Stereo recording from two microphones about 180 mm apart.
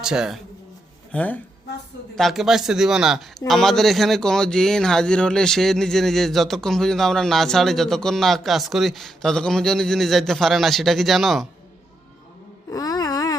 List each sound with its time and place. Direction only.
0.0 s a man's voice: 5° right (ahead or behind)
1.1 s a man's voice: 10° left (ahead or behind)
12.7 s a sound: 20° left (ahead or behind)